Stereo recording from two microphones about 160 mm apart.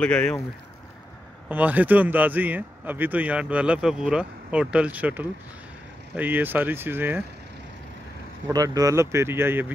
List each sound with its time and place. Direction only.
0.0 s speech: 5° left (ahead or behind)
1.5 s speech: 10° right (ahead or behind)
8.5 s speech: 20° right (ahead or behind)